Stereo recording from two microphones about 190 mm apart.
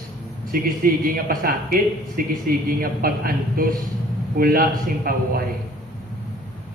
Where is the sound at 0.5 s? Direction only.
50° right (ahead or behind).